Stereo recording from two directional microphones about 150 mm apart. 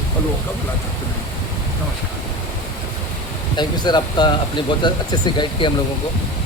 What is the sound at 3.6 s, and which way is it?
Speech, 30° left (ahead or behind).